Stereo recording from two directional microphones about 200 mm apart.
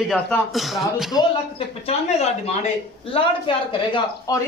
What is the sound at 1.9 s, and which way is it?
Speech, 35° left (ahead or behind).